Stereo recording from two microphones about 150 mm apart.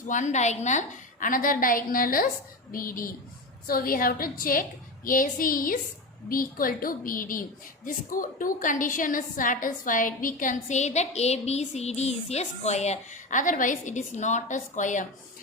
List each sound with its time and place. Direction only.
0.1 s a woman's voice: 55° left (ahead or behind)